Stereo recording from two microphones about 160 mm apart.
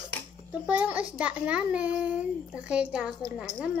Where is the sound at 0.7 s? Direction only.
10° right (ahead or behind).